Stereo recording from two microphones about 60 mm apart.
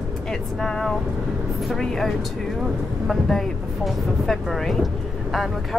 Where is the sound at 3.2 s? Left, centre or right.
Centre.